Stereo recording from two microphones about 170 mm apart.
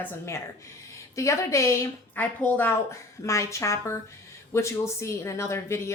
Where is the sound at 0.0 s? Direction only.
15° left (ahead or behind).